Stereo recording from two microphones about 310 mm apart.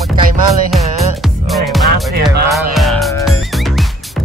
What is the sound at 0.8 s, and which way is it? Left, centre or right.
Music, right.